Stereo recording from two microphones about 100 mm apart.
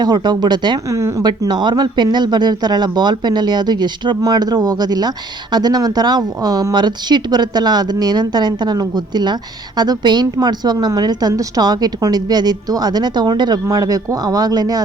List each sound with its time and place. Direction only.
0.0 s speech: 45° right (ahead or behind)
0.9 s a woman's voice: 30° right (ahead or behind)
1.2 s a woman's voice: 45° right (ahead or behind)